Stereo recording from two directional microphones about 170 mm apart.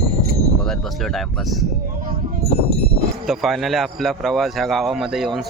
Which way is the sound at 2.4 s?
65° right (ahead or behind).